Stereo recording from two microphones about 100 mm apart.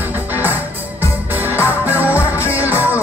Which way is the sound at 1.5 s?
20° right (ahead or behind).